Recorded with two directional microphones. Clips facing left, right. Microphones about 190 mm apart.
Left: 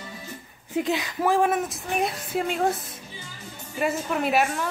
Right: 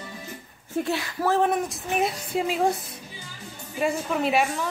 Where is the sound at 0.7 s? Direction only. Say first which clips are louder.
Left 1 dB; 15° left (ahead or behind).